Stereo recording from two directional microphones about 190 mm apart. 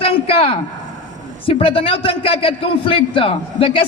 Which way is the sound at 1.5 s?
30° left (ahead or behind).